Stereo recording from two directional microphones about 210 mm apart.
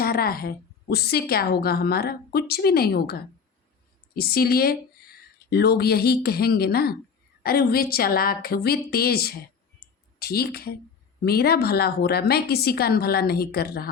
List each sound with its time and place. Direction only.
0.0 s a woman's voice: 45° left (ahead or behind)